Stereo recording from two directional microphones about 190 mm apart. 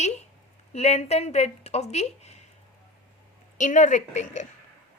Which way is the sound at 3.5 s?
40° left (ahead or behind).